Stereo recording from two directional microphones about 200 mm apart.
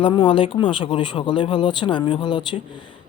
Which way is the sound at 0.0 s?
25° left (ahead or behind).